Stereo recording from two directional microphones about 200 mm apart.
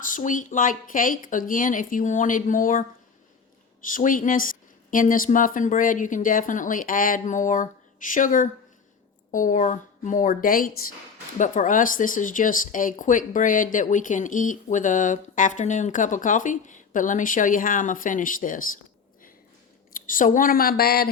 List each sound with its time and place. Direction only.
0.0 s speech: 40° left (ahead or behind)
3.8 s speech: 40° left (ahead or behind)
19.9 s a woman's voice: 40° left (ahead or behind)